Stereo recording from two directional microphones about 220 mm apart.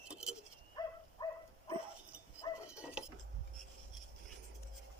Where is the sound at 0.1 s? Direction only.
5° right (ahead or behind).